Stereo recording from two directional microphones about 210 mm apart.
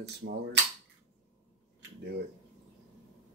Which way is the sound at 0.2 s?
55° right (ahead or behind).